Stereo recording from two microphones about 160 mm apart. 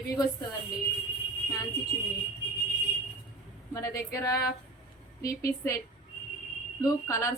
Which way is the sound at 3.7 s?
20° left (ahead or behind).